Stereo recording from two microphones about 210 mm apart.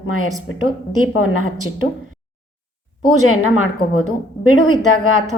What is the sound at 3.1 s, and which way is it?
A woman's voice, 85° left.